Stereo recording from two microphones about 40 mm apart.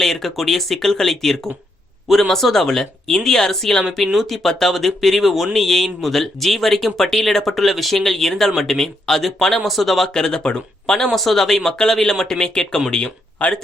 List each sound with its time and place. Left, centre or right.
0.0 s speech: centre
10.2 s speech: centre
11.1 s speech: centre; by 13.5 s left